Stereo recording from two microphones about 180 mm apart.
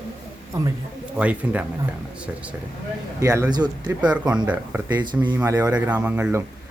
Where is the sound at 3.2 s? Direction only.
20° right (ahead or behind).